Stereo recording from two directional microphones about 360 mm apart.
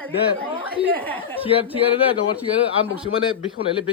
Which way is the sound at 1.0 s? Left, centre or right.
Centre.